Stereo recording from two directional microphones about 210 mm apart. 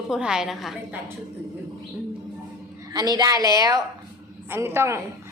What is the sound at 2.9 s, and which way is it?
A child's voice, 20° right (ahead or behind).